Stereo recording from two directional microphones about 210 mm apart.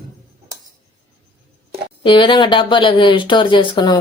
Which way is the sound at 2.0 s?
25° left (ahead or behind).